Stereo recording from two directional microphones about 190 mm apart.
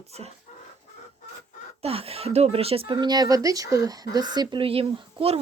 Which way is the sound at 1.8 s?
30° right (ahead or behind).